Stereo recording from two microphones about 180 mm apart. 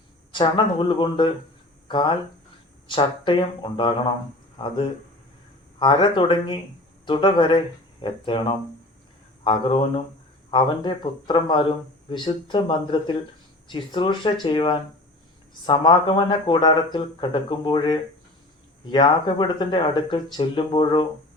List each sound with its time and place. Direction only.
0.3 s speech: 25° left (ahead or behind)